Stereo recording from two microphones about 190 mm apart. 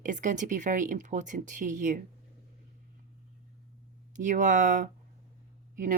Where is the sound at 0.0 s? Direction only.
40° right (ahead or behind).